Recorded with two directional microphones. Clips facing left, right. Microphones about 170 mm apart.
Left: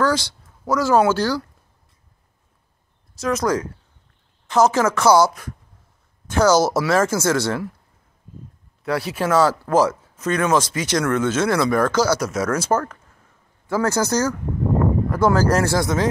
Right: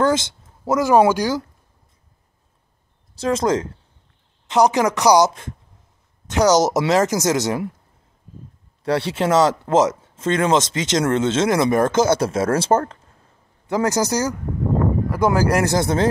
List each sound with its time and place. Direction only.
0.0 s speech: 20° right (ahead or behind)
3.2 s speech: 25° right (ahead or behind)
8.8 s speech: 30° right (ahead or behind)